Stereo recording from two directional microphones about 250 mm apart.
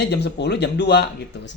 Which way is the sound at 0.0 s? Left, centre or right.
Left.